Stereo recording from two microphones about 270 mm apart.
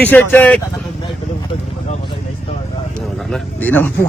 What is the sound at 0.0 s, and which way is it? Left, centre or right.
Speech, centre.